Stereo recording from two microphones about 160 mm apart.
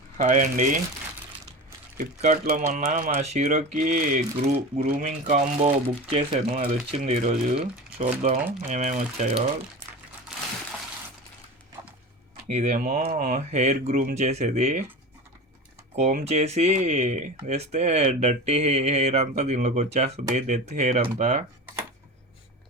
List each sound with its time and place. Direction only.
0.2 s speech: 55° right (ahead or behind)
2.0 s speech: 50° right (ahead or behind)
12.5 s speech: 45° right (ahead or behind)
16.2 s speech: 45° right (ahead or behind)